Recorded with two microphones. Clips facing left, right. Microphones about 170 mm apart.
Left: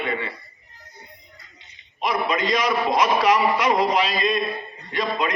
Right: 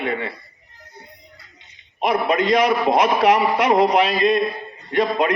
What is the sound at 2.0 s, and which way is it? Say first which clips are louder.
A man's voice: right 4 dB; 60° right (ahead or behind).